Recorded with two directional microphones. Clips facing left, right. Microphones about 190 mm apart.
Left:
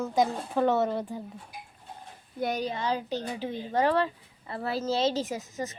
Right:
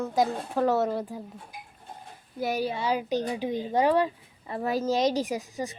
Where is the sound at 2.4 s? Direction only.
5° right (ahead or behind).